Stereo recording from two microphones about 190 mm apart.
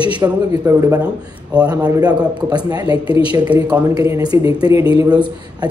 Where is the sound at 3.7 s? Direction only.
15° right (ahead or behind).